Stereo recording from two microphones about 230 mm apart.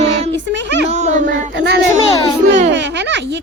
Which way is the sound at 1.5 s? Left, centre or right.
Right.